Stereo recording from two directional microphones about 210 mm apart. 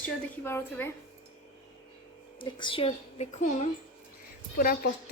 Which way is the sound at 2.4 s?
20° left (ahead or behind).